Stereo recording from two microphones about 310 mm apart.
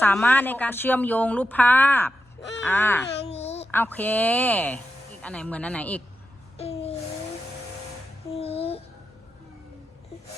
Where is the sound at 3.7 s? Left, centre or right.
Centre.